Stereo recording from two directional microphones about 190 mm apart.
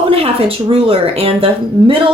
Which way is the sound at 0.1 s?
30° right (ahead or behind).